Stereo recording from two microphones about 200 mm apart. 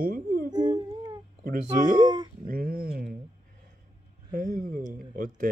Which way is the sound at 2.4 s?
45° right (ahead or behind).